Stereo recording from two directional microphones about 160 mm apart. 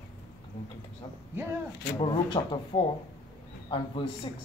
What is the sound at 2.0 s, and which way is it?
Speech, 30° left (ahead or behind).